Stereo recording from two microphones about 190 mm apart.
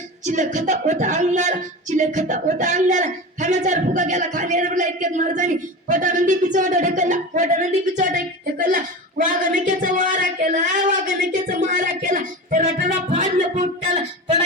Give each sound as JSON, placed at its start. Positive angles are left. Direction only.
{"t": 0.3, "sound": "speech", "side_deg": -40}